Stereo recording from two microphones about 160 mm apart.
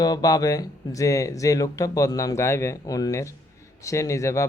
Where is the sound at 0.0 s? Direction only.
25° left (ahead or behind).